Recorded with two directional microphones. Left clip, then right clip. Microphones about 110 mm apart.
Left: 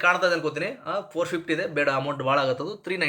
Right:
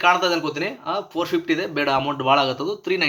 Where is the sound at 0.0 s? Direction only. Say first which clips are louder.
Right 3 dB; 40° left (ahead or behind).